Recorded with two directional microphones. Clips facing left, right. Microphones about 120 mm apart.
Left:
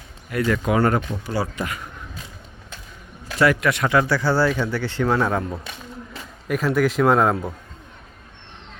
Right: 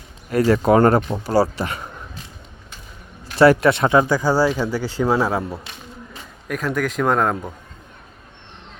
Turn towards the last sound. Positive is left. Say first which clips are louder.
# left 2 dB
turn(degrees=5)  # may be behind; listen again after turning